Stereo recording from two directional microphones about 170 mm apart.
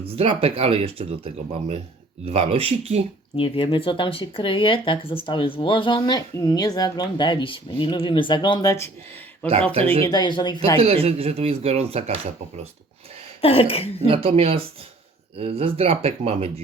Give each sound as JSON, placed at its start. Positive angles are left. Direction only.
{"t": 0.0, "sound": "speech", "side_deg": -35}
{"t": 3.3, "sound": "speech", "side_deg": 30}
{"t": 10.0, "sound": "speech", "side_deg": 25}
{"t": 10.8, "sound": "speech", "side_deg": -35}
{"t": 13.4, "sound": "speech", "side_deg": 35}
{"t": 14.1, "sound": "speech", "side_deg": -35}